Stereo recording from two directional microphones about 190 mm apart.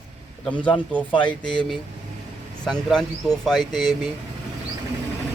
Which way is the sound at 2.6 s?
5° left (ahead or behind).